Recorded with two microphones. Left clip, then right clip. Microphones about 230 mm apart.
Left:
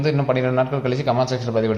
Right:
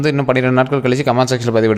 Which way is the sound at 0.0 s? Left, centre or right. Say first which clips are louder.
Right 5 dB; right.